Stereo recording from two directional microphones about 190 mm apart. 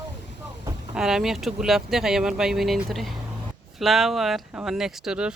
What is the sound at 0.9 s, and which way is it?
Speech, 5° right (ahead or behind).